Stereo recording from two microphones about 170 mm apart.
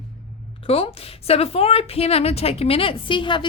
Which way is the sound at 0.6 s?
35° left (ahead or behind).